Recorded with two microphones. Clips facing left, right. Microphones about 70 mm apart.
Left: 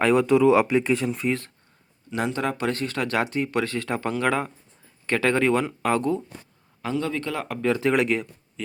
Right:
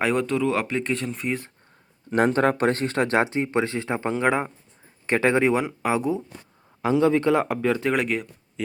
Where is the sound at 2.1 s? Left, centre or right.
Right; by 7.6 s centre.